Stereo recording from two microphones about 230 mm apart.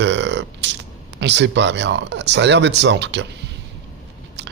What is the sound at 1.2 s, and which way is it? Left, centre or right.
Speech, right.